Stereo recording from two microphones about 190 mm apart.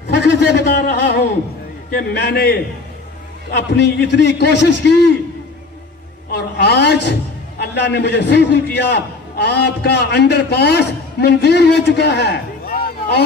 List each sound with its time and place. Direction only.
0.1 s a sound: 65° left (ahead or behind)
0.7 s a man's voice: 55° left (ahead or behind)
6.3 s a man's voice: 60° left (ahead or behind)